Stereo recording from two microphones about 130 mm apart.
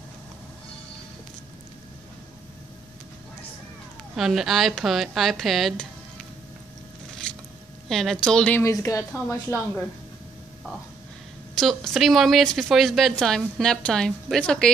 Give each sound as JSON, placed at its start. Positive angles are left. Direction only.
{"t": 4.1, "sound": "a woman's voice", "side_deg": 0}
{"t": 7.3, "sound": "zipper", "side_deg": 5}
{"t": 7.9, "sound": "a woman's voice", "side_deg": 5}
{"t": 8.5, "sound": "a woman's voice", "side_deg": 25}
{"t": 11.5, "sound": "a woman's voice", "side_deg": 0}